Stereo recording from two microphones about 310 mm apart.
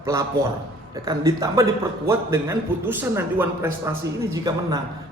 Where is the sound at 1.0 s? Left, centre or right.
Centre.